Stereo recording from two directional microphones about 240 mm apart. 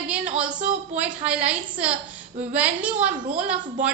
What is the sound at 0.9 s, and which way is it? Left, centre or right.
A woman's voice, centre.